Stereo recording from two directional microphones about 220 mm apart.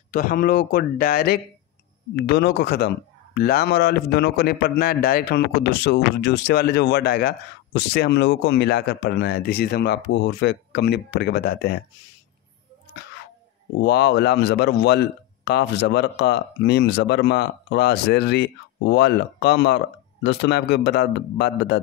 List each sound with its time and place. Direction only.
0.1 s a man's voice: 40° left (ahead or behind)
13.8 s a man's voice: 50° left (ahead or behind)